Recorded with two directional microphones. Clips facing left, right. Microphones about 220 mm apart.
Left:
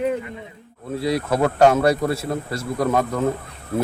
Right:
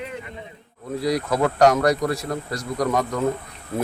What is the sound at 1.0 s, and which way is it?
Speech, 25° left (ahead or behind).